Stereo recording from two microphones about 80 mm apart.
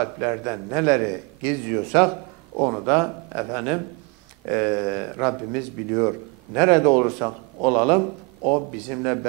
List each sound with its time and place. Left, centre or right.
0.0 s a man's voice: centre